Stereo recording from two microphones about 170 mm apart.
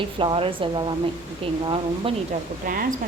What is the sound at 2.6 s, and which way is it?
Speech, 55° right (ahead or behind).